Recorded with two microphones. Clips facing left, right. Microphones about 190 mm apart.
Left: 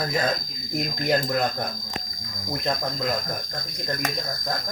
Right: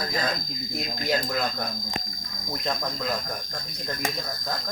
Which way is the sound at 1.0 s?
55° left (ahead or behind).